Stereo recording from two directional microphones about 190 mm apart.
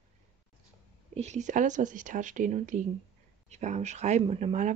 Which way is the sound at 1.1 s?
35° right (ahead or behind).